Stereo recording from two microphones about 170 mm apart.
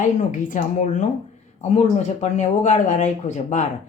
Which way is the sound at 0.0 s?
50° left (ahead or behind).